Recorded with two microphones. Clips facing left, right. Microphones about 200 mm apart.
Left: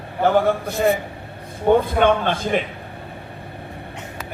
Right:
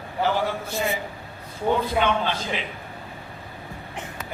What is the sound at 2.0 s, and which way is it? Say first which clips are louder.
Speech: left 6 dB; 55° left (ahead or behind).